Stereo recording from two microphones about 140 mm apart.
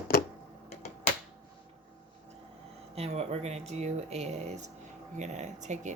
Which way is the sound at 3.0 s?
50° right (ahead or behind).